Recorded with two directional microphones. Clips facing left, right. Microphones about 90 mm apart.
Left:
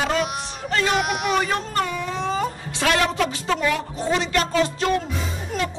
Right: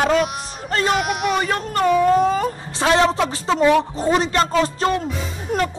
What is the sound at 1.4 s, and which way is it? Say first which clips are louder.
Speech: right 4 dB; 55° right (ahead or behind).